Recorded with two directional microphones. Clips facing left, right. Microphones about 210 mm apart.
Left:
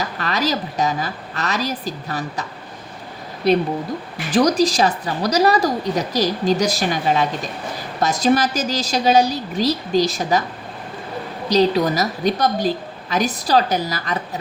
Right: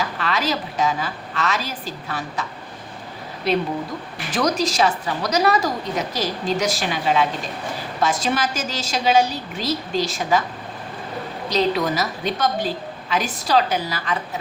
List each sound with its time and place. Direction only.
0.0 s a woman's voice: 40° left (ahead or behind)
4.3 s a woman's voice: 35° left (ahead or behind)
11.4 s a woman's voice: 35° left (ahead or behind)